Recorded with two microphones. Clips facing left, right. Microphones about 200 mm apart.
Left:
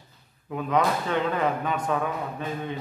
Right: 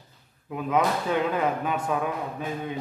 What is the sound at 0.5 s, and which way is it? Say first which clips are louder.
Speech: even; 5° right (ahead or behind).